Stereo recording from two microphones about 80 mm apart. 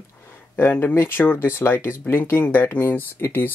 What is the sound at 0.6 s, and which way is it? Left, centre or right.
Speech, left.